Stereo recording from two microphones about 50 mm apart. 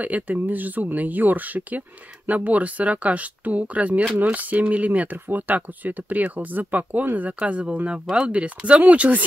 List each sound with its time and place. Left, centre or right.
0.0 s speech: right